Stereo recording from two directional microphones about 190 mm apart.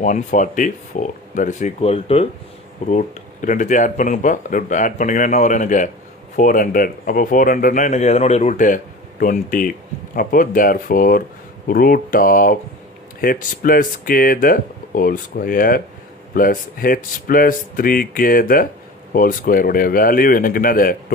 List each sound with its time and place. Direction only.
0.0 s speech: 45° left (ahead or behind)